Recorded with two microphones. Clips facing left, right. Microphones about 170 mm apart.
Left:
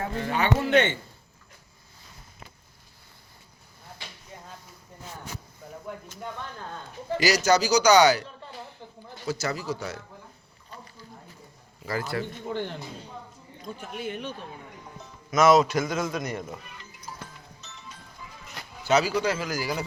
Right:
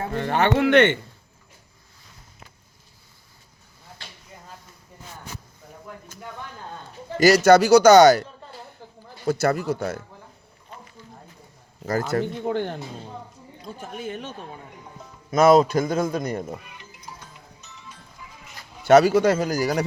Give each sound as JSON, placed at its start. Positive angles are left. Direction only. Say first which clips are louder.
{"t": 0.1, "sound": "speech", "louder": "right 6 dB", "side_deg": -55}
{"t": 7.2, "sound": "speech", "louder": "right 8 dB", "side_deg": -55}
{"t": 8.8, "sound": "a sound", "louder": "even", "side_deg": -40}
{"t": 9.2, "sound": "speech", "louder": "right 8 dB", "side_deg": -55}
{"t": 11.9, "sound": "speech", "louder": "right 6 dB", "side_deg": -45}
{"t": 13.7, "sound": "a man's voice", "louder": "right 2 dB", "side_deg": -45}
{"t": 15.3, "sound": "a man's voice", "louder": "right 4 dB", "side_deg": -30}
{"t": 18.9, "sound": "speech", "louder": "right 8 dB", "side_deg": -50}